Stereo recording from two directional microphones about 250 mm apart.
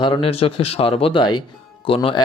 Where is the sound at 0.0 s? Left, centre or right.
Left.